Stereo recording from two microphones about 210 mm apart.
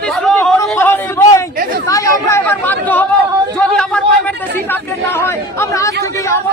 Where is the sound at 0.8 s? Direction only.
10° left (ahead or behind).